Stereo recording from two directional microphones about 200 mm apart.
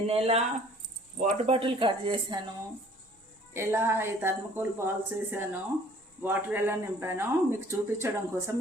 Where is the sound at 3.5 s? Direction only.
15° right (ahead or behind).